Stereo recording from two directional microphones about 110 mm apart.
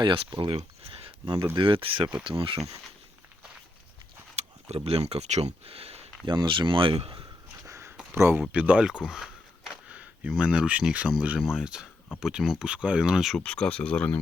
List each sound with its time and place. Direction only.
0.0 s speech: 50° right (ahead or behind)
0.5 s a sound: 60° right (ahead or behind)
1.5 s speech: 50° right (ahead or behind)
4.4 s speech: 70° right (ahead or behind)
6.2 s speech: 45° right (ahead or behind)
7.7 s a sound: 25° right (ahead or behind)
8.1 s speech: 20° right (ahead or behind); by 13.4 s 5° right (ahead or behind)
13.4 s speech: 10° left (ahead or behind)